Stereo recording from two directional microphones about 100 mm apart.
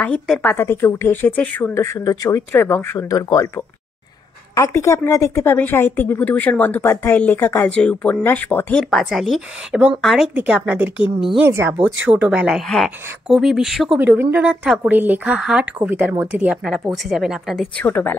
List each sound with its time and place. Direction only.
0.4 s speech: 20° left (ahead or behind)
1.7 s speech: 30° left (ahead or behind)
4.6 s speech: 30° left (ahead or behind)
8.9 s a woman's voice: centre (ahead or behind)
11.4 s a woman's voice: 25° right (ahead or behind); by 12.6 s 10° right (ahead or behind)
12.6 s speech: 5° left (ahead or behind)
13.9 s a woman's voice: 20° right (ahead or behind); by 17.6 s 5° right (ahead or behind)
17.7 s a woman's voice: 20° left (ahead or behind)